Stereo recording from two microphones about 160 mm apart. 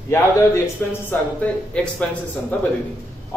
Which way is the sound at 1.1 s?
10° left (ahead or behind).